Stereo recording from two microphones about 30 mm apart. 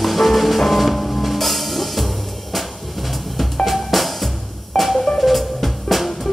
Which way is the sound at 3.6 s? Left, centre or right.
Centre.